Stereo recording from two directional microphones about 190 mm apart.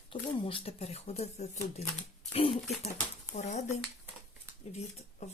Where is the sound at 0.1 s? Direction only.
30° left (ahead or behind).